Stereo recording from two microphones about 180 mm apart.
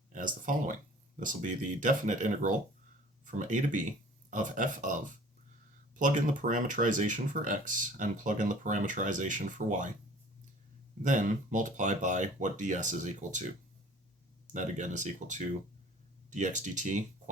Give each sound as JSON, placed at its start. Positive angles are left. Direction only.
{"t": 0.1, "sound": "speech", "side_deg": -45}
{"t": 11.0, "sound": "speech", "side_deg": -45}